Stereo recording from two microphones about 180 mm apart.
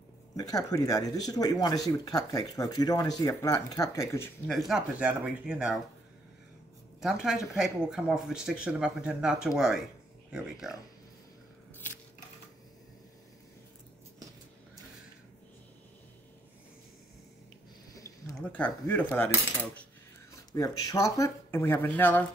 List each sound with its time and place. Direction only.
0.4 s speech: 20° left (ahead or behind)
4.5 s speech: centre (ahead or behind)
7.0 s speech: centre (ahead or behind)
17.9 s speech: 20° left (ahead or behind)
20.3 s speech: 20° left (ahead or behind)